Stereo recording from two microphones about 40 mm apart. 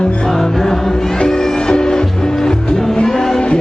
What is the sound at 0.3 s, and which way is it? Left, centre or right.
Music, centre.